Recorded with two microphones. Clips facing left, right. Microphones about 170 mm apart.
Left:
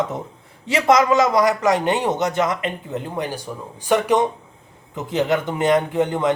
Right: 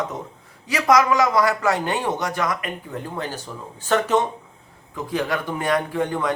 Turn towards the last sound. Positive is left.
turn(degrees=20)  # may be behind; listen again after turning